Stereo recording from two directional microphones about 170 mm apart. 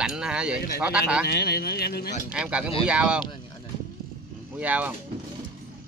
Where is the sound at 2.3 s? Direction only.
5° right (ahead or behind).